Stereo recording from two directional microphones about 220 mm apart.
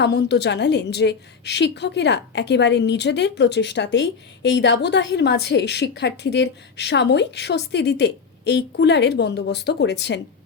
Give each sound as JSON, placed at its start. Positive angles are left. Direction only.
{"t": 0.0, "sound": "a woman's voice", "side_deg": 50}